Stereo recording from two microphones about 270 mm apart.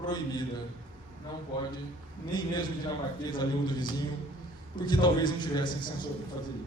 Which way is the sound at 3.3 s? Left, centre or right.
Centre.